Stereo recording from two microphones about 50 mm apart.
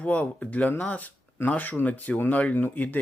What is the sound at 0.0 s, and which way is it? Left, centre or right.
Speech, left.